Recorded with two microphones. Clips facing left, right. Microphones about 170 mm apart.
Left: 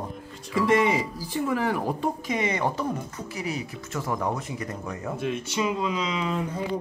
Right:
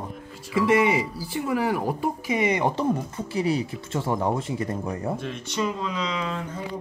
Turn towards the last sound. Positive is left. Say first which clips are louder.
# left 3 dB
turn(degrees=15)  # may be behind; listen again after turning